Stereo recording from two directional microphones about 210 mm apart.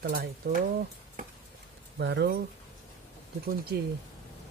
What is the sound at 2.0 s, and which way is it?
Speech, 50° right (ahead or behind).